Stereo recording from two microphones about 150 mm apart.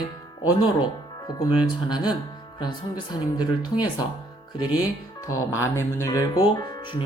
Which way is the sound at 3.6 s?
25° left (ahead or behind).